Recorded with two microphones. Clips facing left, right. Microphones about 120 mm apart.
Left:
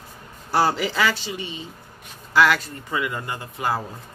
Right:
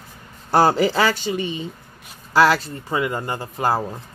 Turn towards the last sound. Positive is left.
turn(degrees=-35)  # may be behind; listen again after turning